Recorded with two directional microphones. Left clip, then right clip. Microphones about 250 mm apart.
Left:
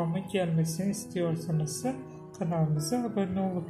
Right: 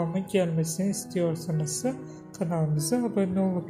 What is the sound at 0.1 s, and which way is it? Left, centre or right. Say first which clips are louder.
Speech: right 4 dB; right.